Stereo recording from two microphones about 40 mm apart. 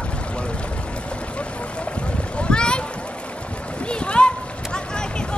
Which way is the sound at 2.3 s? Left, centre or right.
Left.